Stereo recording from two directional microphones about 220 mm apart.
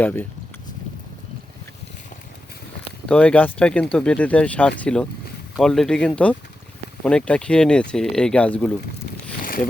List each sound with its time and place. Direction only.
0.0 s speech: 10° left (ahead or behind)
3.1 s speech: 5° left (ahead or behind)
9.4 s boat: 40° left (ahead or behind)